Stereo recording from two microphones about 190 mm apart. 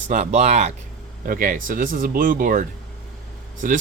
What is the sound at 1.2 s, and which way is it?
Speech, 45° right (ahead or behind).